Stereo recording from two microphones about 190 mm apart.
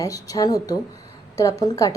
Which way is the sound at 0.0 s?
20° left (ahead or behind).